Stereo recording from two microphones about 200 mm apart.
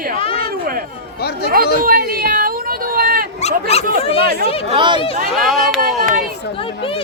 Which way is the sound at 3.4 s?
30° left (ahead or behind).